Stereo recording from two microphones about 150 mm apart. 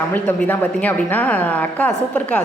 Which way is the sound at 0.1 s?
10° left (ahead or behind).